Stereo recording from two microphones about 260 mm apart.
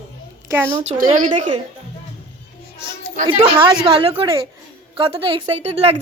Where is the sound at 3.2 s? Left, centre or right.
Centre.